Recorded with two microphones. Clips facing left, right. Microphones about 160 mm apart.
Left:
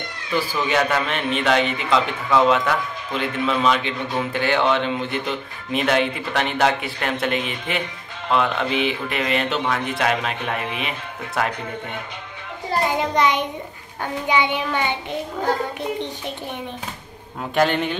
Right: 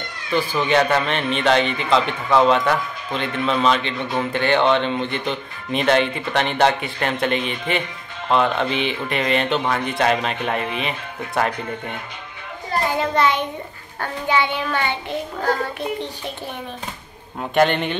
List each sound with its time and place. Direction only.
0.7 s a child's voice: 5° left (ahead or behind)
12.8 s a child's voice: 15° left (ahead or behind)
17.4 s speech: 5° left (ahead or behind)